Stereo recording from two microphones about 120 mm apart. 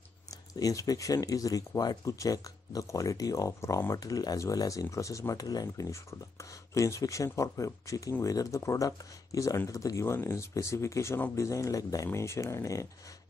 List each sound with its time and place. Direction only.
0.6 s speech: 30° left (ahead or behind)